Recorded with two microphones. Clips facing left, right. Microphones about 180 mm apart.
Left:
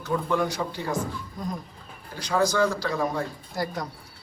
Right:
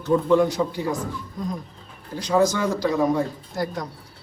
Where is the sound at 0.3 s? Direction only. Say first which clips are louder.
Right 8 dB; 25° right (ahead or behind).